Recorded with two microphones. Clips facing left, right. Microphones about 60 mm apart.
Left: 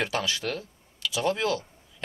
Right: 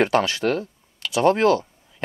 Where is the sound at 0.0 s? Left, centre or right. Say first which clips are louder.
Right 9 dB; right.